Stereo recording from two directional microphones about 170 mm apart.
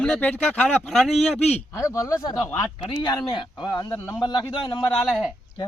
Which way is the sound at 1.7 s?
20° left (ahead or behind).